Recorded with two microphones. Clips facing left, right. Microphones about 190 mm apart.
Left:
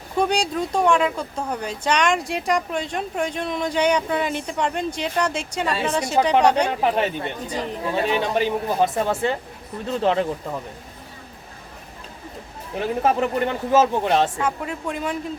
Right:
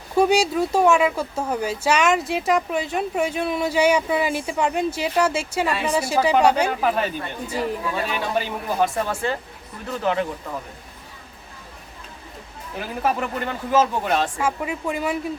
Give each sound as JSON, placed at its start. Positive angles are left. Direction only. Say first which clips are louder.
{"t": 0.2, "sound": "speech", "louder": "right 4 dB", "side_deg": -5}
{"t": 6.7, "sound": "speech", "louder": "left 1 dB", "side_deg": 25}
{"t": 7.4, "sound": "speech", "louder": "right 6 dB", "side_deg": -5}
{"t": 7.9, "sound": "speech", "louder": "left 8 dB", "side_deg": 25}
{"t": 13.0, "sound": "speech", "louder": "left 3 dB", "side_deg": 25}
{"t": 14.3, "sound": "speech", "louder": "right 1 dB", "side_deg": -5}